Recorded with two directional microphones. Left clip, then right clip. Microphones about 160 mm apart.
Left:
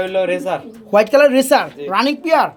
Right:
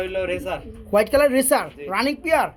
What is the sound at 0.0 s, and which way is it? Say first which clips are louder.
Speech: left 7 dB; 30° left (ahead or behind).